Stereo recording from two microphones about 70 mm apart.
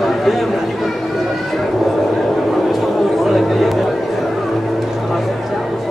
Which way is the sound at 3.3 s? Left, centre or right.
Centre.